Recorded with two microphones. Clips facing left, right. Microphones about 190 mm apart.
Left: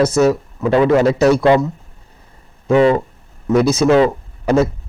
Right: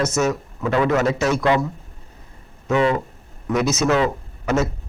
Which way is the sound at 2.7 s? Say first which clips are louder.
Left 6 dB; 35° left (ahead or behind).